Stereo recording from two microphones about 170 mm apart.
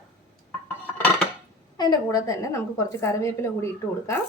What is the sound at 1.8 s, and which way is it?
A woman's voice, 20° left (ahead or behind).